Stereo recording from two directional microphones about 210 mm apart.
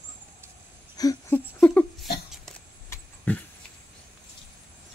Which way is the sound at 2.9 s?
10° left (ahead or behind).